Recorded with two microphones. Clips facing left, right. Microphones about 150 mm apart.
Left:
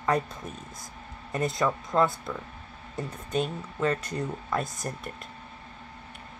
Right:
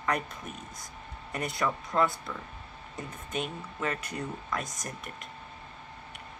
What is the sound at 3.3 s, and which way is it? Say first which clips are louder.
Speech: left 6 dB; 35° left (ahead or behind).